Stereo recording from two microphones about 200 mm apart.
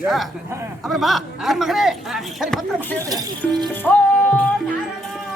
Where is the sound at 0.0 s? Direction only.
Centre (ahead or behind).